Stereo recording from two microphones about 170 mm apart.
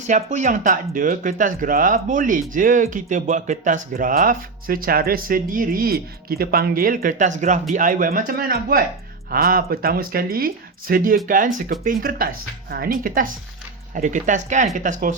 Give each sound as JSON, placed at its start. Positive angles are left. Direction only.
{"t": 0.0, "sound": "speech", "side_deg": -45}